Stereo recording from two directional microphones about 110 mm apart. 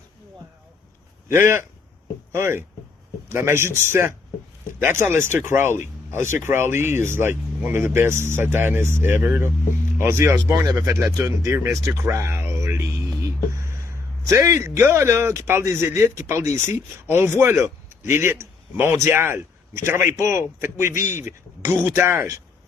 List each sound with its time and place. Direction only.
1.3 s speech: 20° right (ahead or behind)
14.3 s a man's voice: 30° right (ahead or behind)